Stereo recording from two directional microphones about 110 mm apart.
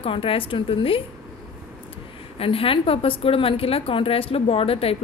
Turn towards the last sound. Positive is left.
turn(degrees=60)  # may be behind; listen again after turning